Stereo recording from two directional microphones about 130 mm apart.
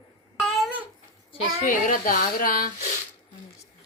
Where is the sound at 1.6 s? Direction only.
90° left.